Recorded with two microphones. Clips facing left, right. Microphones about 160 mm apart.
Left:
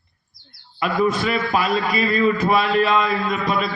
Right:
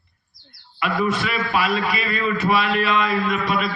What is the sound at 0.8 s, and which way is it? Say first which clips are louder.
A man's voice: left 3 dB; 35° left (ahead or behind).